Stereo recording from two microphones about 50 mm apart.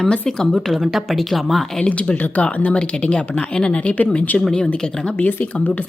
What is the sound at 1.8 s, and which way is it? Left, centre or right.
Speech, left.